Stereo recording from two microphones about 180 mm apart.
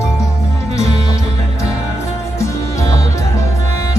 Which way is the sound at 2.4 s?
15° left (ahead or behind).